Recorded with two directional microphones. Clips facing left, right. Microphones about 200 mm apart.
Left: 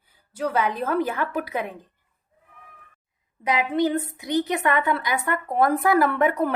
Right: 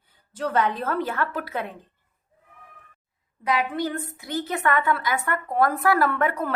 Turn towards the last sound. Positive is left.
turn(degrees=20)  # may be behind; listen again after turning